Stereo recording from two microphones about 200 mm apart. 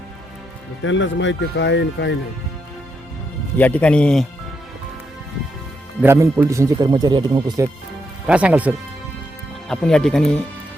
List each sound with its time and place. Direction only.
0.8 s speech: 70° left (ahead or behind)
3.6 s a man's voice: 5° left (ahead or behind)
6.0 s speech: 15° right (ahead or behind)
9.6 s a man's voice: 5° left (ahead or behind)